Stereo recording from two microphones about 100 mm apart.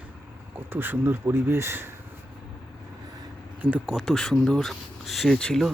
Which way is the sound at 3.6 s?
15° right (ahead or behind).